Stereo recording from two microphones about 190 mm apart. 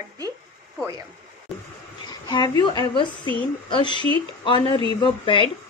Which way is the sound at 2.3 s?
25° left (ahead or behind).